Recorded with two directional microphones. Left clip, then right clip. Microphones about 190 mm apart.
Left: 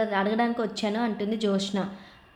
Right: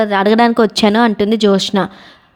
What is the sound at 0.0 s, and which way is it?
A woman's voice, 60° right (ahead or behind).